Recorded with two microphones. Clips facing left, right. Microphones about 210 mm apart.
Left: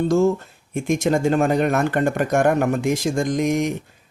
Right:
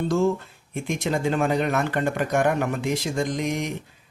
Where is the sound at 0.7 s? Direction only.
45° left (ahead or behind).